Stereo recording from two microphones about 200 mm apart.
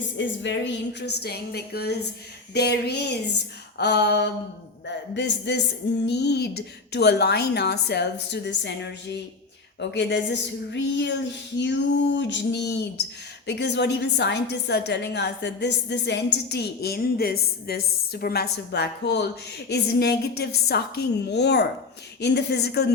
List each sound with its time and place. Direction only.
0.2 s a woman's voice: 60° left (ahead or behind)
9.9 s a woman's voice: 60° left (ahead or behind)